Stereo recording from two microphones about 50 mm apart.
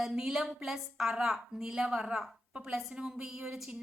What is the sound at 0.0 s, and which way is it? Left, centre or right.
A woman's voice, centre.